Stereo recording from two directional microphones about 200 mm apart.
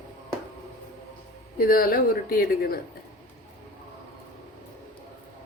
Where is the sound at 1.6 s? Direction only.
45° left (ahead or behind).